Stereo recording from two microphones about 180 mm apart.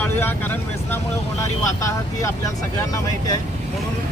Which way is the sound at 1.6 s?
20° left (ahead or behind).